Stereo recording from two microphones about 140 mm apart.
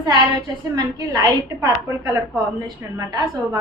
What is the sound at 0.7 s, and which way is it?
A woman's voice, 25° right (ahead or behind).